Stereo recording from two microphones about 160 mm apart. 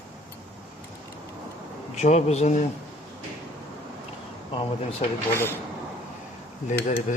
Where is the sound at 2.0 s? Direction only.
45° left (ahead or behind).